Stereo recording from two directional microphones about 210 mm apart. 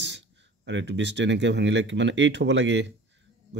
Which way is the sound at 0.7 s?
60° right (ahead or behind).